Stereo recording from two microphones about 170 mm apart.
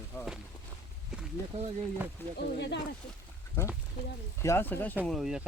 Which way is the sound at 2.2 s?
15° left (ahead or behind).